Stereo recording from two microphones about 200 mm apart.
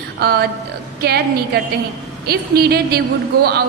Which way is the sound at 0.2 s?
50° right (ahead or behind).